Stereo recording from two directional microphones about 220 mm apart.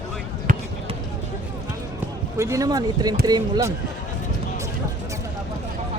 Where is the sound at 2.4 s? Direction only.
15° right (ahead or behind).